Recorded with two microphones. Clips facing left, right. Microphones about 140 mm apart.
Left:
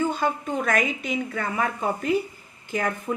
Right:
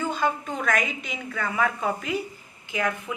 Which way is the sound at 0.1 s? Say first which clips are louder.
Left 1 dB; 45° left (ahead or behind).